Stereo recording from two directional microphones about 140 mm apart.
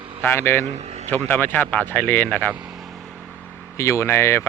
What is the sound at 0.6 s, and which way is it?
Speech, 55° right (ahead or behind).